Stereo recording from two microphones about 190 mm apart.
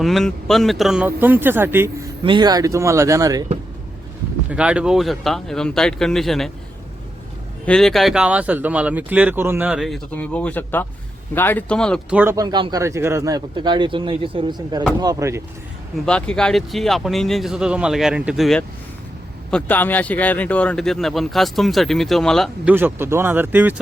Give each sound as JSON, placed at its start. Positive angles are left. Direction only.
{"t": 0.0, "sound": "speech", "side_deg": 0}
{"t": 2.2, "sound": "speech", "side_deg": -25}
{"t": 4.4, "sound": "speech", "side_deg": -5}
{"t": 7.6, "sound": "speech", "side_deg": 5}
{"t": 12.1, "sound": "a man's voice", "side_deg": -10}
{"t": 16.0, "sound": "speech", "side_deg": 5}
{"t": 22.7, "sound": "speech", "side_deg": -10}